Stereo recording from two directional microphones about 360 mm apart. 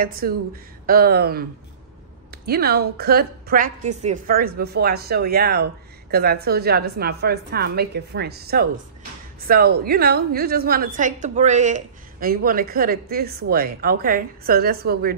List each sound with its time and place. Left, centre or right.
0.0 s a woman's voice: right